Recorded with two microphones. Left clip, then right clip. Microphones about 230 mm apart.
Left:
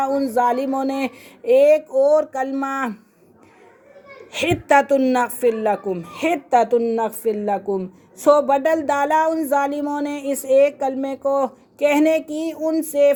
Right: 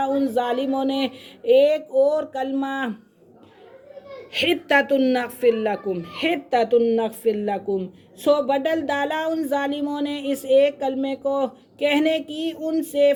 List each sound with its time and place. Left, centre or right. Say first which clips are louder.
0.0 s speech: left 3 dB; centre
4.3 s speech: left 3 dB; centre